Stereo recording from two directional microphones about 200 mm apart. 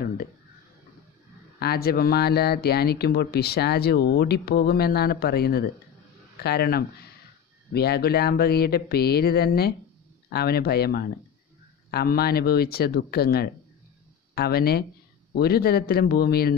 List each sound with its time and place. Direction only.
1.6 s speech: 50° left (ahead or behind)